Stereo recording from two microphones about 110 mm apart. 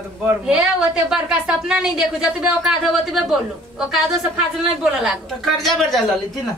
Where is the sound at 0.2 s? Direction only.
15° right (ahead or behind).